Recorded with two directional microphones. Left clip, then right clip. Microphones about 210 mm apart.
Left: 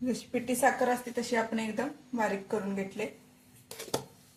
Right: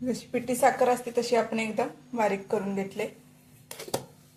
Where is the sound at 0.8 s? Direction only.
25° right (ahead or behind).